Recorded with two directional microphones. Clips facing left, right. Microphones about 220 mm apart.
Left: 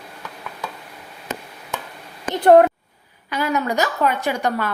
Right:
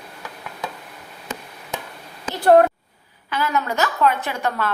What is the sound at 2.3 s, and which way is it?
A woman's voice, 20° left (ahead or behind).